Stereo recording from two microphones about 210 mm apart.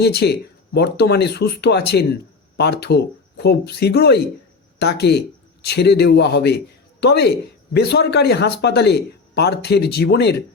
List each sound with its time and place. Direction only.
0.0 s speech: 50° left (ahead or behind)